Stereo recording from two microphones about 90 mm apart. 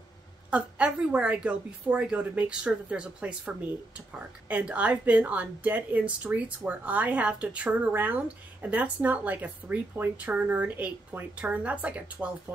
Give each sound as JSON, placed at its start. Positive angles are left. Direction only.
{"t": 0.5, "sound": "a woman's voice", "side_deg": -15}